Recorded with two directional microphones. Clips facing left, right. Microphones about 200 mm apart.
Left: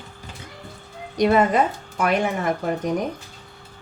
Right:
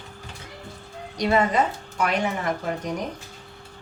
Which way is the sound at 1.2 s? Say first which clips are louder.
Left 4 dB; 55° left (ahead or behind).